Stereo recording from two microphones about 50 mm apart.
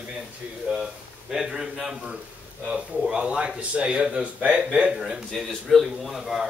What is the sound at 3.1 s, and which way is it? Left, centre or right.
A man's voice, right.